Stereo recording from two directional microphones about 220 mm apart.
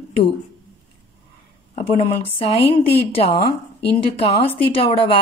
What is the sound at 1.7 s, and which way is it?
A woman's voice, 25° left (ahead or behind).